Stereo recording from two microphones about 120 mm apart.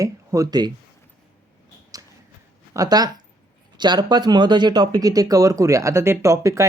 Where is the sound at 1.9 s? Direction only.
30° right (ahead or behind).